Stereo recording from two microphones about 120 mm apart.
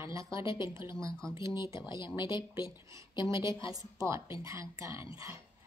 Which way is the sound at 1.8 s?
40° left (ahead or behind).